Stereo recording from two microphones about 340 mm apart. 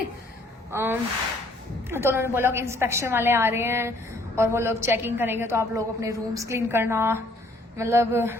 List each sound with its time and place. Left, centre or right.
0.7 s a woman's voice: centre